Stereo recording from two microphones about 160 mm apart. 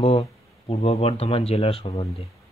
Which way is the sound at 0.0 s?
40° left (ahead or behind).